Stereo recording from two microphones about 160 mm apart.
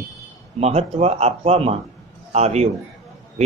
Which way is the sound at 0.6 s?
40° right (ahead or behind).